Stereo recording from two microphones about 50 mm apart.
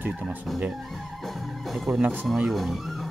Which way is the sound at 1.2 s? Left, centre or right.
Centre.